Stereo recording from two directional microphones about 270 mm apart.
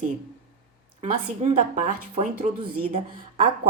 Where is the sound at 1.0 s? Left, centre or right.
Right.